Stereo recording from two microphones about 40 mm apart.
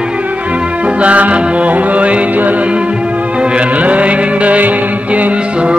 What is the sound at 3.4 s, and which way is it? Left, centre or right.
Music, right.